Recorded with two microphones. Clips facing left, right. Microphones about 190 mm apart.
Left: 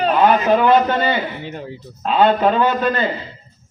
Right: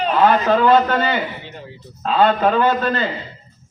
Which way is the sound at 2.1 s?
15° left (ahead or behind).